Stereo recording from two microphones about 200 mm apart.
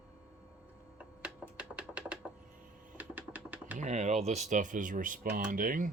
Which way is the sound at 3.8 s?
35° right (ahead or behind).